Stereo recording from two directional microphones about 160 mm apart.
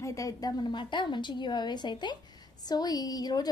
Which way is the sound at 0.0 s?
20° left (ahead or behind).